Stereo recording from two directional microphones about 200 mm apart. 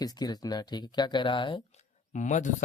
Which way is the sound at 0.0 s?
20° left (ahead or behind).